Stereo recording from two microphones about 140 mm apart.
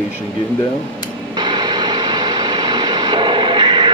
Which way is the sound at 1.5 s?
30° right (ahead or behind).